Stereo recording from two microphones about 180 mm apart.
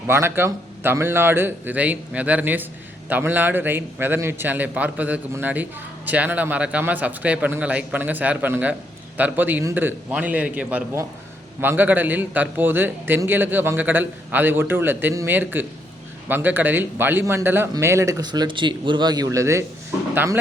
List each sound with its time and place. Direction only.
0.1 s a man's voice: 15° right (ahead or behind)